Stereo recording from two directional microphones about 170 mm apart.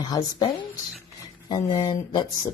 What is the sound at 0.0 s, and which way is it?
A woman's voice, 20° left (ahead or behind).